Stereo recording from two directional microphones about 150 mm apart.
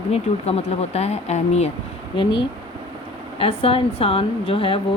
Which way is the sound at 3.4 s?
40° left (ahead or behind).